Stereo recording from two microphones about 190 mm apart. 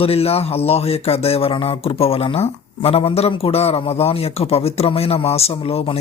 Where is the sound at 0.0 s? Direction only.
30° left (ahead or behind).